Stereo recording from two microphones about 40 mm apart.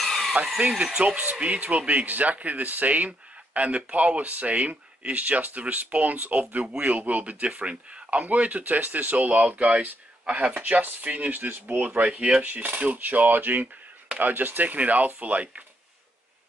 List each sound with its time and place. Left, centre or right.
0.0 s a sound: centre
0.9 s speech: right
10.8 s speech: right